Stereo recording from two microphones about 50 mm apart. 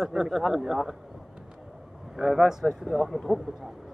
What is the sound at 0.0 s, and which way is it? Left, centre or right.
Speech, centre.